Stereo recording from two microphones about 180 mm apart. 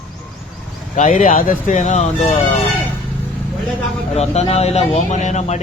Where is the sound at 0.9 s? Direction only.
45° left (ahead or behind).